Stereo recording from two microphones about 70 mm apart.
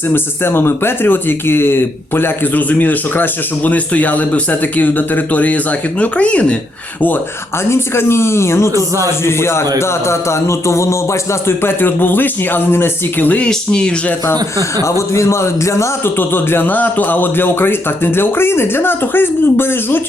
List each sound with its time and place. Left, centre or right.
0.1 s speech: left; by 6.6 s centre
7.7 s a man's voice: left
13.5 s speech: centre
14.8 s a man's voice: left